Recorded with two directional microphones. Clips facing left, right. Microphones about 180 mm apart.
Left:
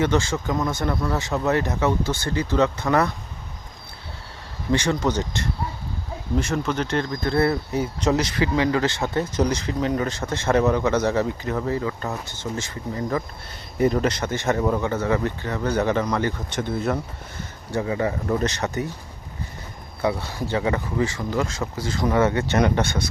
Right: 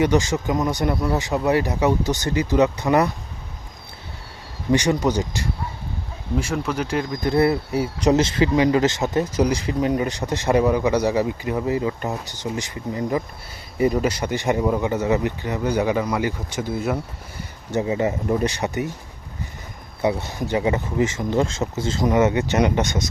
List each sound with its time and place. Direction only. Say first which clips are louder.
0.0 s speech: right 3 dB; 15° right (ahead or behind)
4.7 s speech: right 3 dB; 15° right (ahead or behind)
8.1 s speech: right 5 dB; 25° right (ahead or behind); by 17.0 s 5° right (ahead or behind)
17.7 s speech: right 2 dB; 20° right (ahead or behind)
20.0 s speech: right 2 dB; 20° right (ahead or behind)